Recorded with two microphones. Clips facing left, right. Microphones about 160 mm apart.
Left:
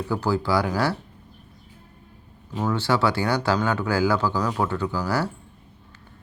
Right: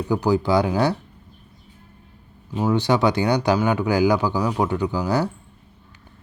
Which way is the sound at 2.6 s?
15° right (ahead or behind).